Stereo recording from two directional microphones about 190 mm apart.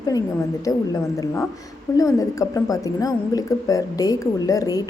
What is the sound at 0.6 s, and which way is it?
A woman's voice, 20° left (ahead or behind).